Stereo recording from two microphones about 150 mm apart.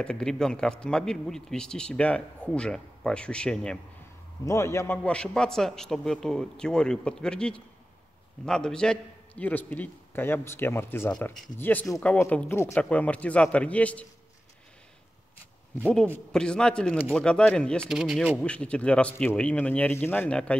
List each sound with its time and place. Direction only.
0.0 s speech: 5° left (ahead or behind)
4.5 s a man's voice: 20° left (ahead or behind)
15.9 s speech: 5° left (ahead or behind)
17.9 s speech: 5° right (ahead or behind)
18.4 s a man's voice: 5° left (ahead or behind)